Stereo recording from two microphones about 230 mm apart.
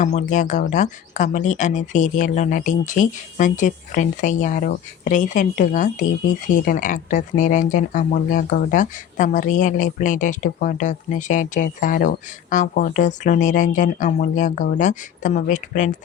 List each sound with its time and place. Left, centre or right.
0.0 s speech: left